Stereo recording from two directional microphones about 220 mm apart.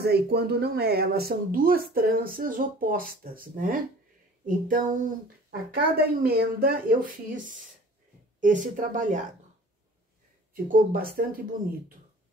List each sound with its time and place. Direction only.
0.0 s speech: 45° right (ahead or behind)
10.5 s speech: 40° right (ahead or behind)